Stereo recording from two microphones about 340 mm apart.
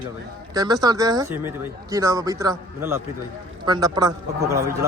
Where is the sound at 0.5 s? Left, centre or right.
Centre.